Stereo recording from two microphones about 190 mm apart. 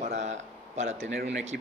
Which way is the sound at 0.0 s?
35° right (ahead or behind).